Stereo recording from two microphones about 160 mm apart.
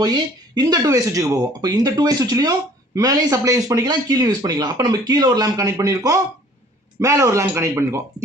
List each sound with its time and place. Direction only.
0.0 s speech: 25° right (ahead or behind)